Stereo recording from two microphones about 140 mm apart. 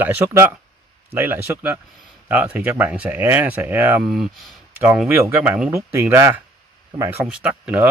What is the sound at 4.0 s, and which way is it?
Speech, centre (ahead or behind).